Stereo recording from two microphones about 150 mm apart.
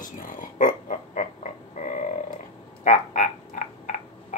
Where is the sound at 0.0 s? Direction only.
65° left (ahead or behind).